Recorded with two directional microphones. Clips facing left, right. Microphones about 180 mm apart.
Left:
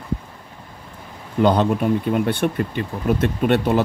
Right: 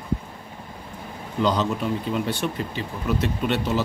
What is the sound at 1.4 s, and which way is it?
Speech, 55° left (ahead or behind).